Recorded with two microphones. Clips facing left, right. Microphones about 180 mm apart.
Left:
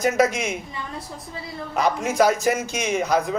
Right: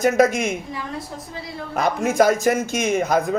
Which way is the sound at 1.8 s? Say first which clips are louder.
Right 2 dB; 50° right (ahead or behind).